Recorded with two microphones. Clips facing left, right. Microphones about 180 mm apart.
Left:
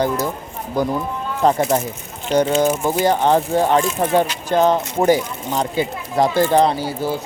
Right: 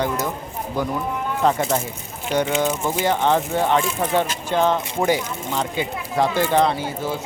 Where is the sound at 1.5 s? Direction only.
35° left (ahead or behind).